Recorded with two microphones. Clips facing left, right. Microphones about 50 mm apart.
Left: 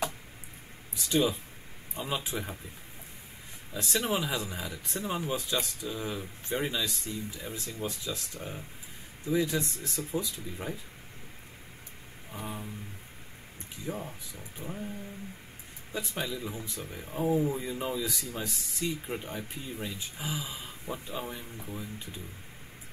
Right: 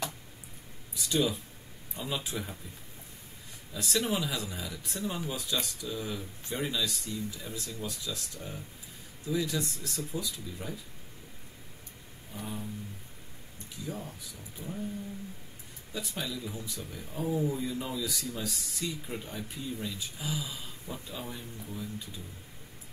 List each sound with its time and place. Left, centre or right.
1.0 s speech: left
3.7 s speech: left
12.3 s speech: left
13.8 s speech: left
14.6 s a sound: left
15.9 s speech: left